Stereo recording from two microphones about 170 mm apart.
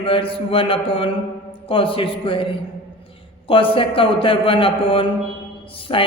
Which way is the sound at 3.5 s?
30° left (ahead or behind).